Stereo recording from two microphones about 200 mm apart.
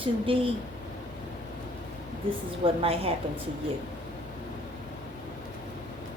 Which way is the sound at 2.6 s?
30° right (ahead or behind).